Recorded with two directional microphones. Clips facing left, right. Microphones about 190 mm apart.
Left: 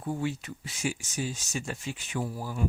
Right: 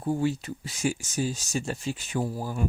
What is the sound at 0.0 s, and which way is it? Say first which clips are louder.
Speech: right 5 dB; 30° right (ahead or behind).